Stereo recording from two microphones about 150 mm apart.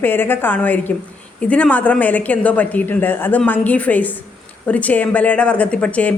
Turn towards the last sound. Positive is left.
turn(degrees=10)  # may be behind; listen again after turning